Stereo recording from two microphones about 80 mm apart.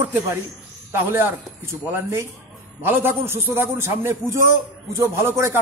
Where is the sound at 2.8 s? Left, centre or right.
Right.